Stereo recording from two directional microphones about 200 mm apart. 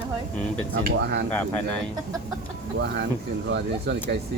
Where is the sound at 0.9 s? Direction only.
55° right (ahead or behind).